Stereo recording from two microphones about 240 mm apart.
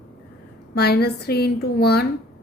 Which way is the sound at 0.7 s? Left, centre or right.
Left.